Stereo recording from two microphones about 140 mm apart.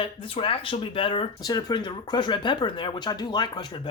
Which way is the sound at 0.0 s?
40° left (ahead or behind).